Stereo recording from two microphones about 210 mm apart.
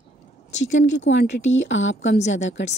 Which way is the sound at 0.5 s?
60° left (ahead or behind).